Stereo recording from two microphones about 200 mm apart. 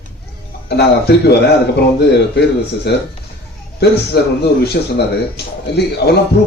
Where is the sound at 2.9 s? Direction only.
55° left (ahead or behind).